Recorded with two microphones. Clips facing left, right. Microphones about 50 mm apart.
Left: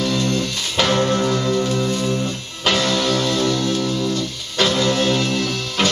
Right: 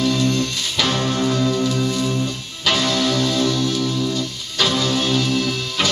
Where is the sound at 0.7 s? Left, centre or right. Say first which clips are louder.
Left 3 dB; left.